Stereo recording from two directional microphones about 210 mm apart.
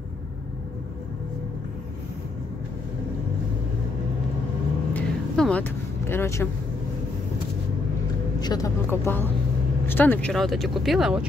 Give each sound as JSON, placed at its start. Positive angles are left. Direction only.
{"t": 4.9, "sound": "vehicle", "side_deg": 5}
{"t": 8.4, "sound": "speech", "side_deg": 20}